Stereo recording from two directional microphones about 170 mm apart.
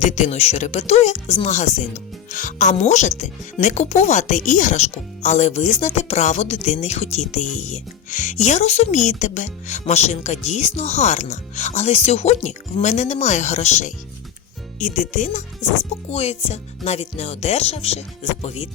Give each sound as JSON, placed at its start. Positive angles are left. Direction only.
{"t": 0.0, "sound": "speech", "side_deg": 40}